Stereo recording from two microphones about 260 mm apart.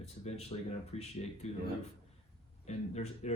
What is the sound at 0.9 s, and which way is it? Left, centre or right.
Speech, left.